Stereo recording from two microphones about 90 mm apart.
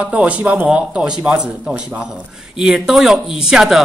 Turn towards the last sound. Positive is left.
turn(degrees=-5)  # may be behind; listen again after turning